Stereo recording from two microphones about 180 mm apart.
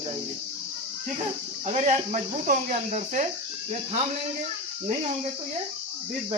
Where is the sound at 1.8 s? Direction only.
40° right (ahead or behind).